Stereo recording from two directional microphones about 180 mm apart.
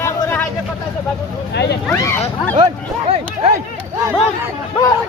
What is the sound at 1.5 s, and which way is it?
Speech, 70° left (ahead or behind).